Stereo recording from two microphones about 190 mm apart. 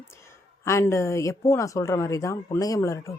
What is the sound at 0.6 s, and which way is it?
Speech, 15° left (ahead or behind).